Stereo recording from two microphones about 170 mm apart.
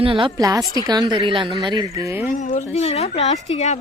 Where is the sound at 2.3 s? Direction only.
50° left (ahead or behind).